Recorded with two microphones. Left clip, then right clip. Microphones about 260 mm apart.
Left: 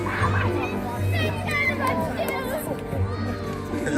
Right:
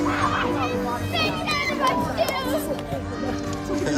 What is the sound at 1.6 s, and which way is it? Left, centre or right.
Children playing, centre.